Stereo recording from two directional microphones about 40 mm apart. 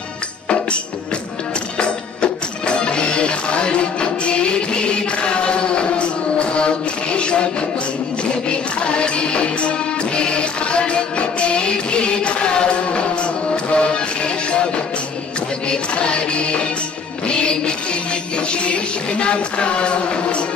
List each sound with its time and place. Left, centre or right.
1.8 s music: left
8.5 s music: left
15.7 s music: left